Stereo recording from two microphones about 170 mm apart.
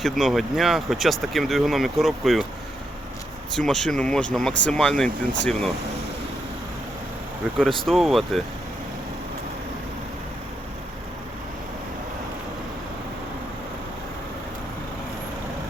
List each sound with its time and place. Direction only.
0.0 s speech: centre (ahead or behind)
3.7 s speech: 5° left (ahead or behind)
7.6 s speech: centre (ahead or behind)